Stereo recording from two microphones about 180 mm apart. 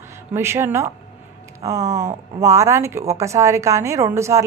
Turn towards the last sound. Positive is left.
turn(degrees=-15)  # may be behind; listen again after turning